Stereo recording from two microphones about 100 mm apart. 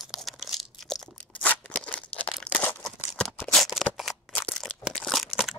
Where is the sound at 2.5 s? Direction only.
20° left (ahead or behind).